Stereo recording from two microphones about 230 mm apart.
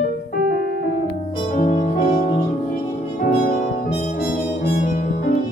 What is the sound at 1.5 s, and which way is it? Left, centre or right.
Music, left.